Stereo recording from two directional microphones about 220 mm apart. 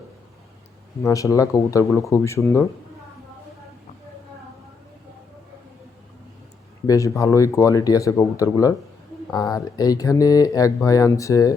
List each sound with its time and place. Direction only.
1.0 s speech: 15° left (ahead or behind)
6.8 s speech: 15° left (ahead or behind)